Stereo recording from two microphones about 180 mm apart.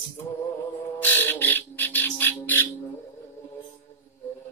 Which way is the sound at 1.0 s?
10° left (ahead or behind).